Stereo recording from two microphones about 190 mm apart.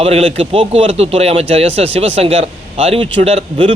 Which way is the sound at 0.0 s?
30° right (ahead or behind).